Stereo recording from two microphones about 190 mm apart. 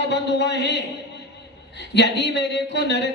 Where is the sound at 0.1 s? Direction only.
65° left (ahead or behind).